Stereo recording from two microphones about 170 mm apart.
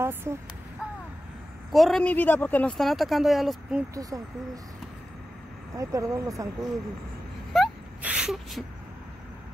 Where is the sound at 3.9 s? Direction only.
20° right (ahead or behind).